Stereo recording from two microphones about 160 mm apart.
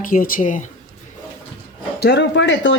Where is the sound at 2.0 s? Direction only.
90° left.